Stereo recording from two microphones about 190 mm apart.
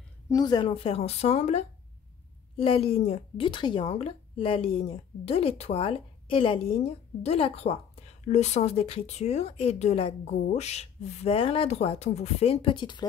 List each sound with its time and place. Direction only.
0.3 s speech: 20° left (ahead or behind)